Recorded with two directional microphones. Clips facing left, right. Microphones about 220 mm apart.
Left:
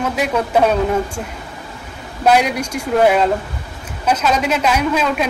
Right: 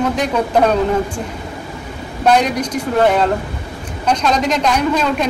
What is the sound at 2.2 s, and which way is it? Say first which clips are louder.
A woman's voice: right 1 dB; 10° left (ahead or behind).